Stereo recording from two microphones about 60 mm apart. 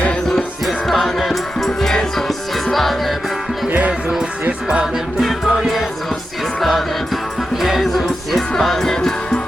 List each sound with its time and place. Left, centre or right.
0.6 s music: centre
3.7 s music: right
5.2 s music: centre